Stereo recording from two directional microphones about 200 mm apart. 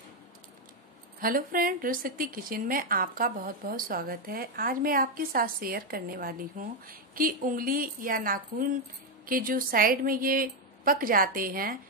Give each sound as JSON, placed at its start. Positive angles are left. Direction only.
{"t": 1.2, "sound": "a woman's voice", "side_deg": -45}